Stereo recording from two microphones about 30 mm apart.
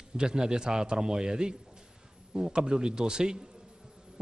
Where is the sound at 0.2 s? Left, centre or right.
Right.